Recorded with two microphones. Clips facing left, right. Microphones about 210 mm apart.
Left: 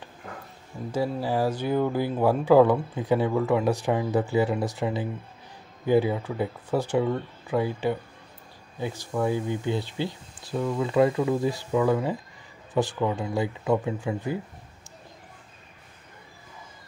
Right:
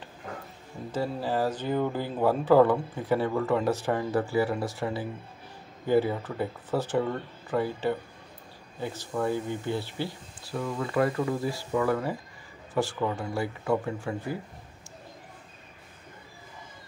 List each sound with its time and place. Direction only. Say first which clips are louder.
0.9 s speech: left 3 dB; 10° left (ahead or behind)